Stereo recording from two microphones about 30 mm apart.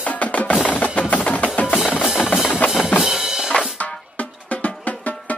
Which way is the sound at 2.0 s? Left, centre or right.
Centre.